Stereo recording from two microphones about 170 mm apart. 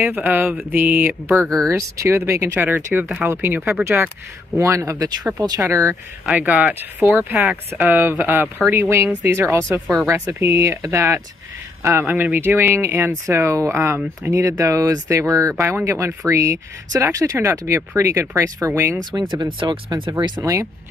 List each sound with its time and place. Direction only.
0.0 s speech: 10° right (ahead or behind)
1.4 s speech: 5° left (ahead or behind)
1.7 s speech: 15° right (ahead or behind)
19.2 s speech: 25° right (ahead or behind)